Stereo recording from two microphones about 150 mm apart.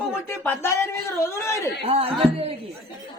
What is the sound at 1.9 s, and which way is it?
Speech, 40° right (ahead or behind).